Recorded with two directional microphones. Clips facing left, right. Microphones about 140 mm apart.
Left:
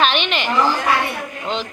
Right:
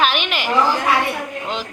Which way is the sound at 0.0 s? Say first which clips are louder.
Left 1 dB; 5° right (ahead or behind).